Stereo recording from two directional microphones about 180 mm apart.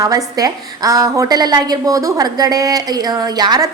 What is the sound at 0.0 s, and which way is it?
A woman's voice, 20° right (ahead or behind).